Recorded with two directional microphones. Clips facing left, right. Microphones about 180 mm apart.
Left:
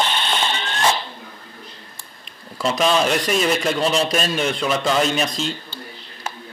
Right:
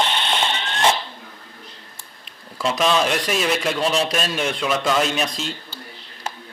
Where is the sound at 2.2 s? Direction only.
Centre (ahead or behind).